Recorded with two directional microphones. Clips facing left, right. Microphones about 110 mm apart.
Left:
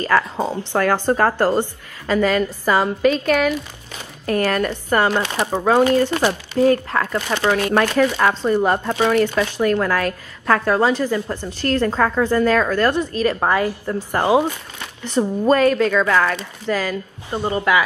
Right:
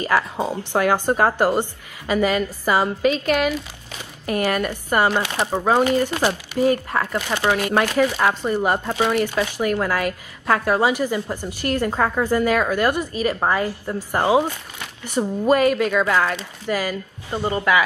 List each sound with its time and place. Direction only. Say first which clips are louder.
0.1 s speech: left 2 dB; 15° right (ahead or behind)
14.2 s speech: left 1 dB; 15° left (ahead or behind)
15.0 s speech: left 2 dB; 10° right (ahead or behind)
17.3 s speech: left 1 dB; 15° left (ahead or behind)